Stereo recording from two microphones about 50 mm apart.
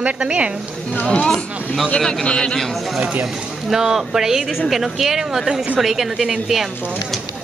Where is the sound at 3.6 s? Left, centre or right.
Centre.